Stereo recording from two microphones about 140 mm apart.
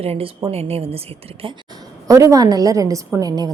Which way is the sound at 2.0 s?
25° right (ahead or behind).